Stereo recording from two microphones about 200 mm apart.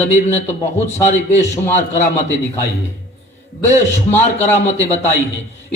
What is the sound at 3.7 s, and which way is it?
Speech, 35° left (ahead or behind).